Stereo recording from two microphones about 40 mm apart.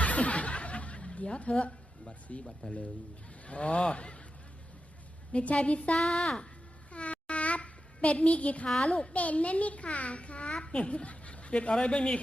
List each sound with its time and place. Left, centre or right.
0.0 s snicker: left
2.4 s speech: centre
3.4 s speech: left
5.3 s a child's voice: left
6.9 s a sound: left
8.9 s a child's voice: left